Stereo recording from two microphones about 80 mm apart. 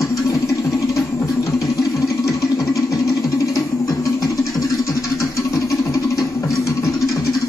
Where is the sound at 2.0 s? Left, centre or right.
Left.